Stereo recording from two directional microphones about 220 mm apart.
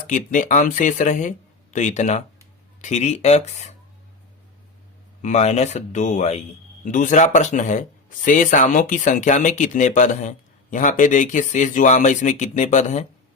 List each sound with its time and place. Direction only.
0.1 s speech: 35° left (ahead or behind)
5.2 s speech: 30° left (ahead or behind)